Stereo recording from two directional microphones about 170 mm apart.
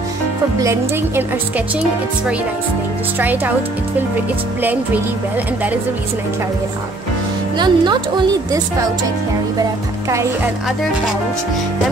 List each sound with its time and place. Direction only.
0.6 s speech: 15° right (ahead or behind)
3.2 s speech: 10° right (ahead or behind)
7.5 s speech: 25° right (ahead or behind)
9.6 s speech: 20° right (ahead or behind)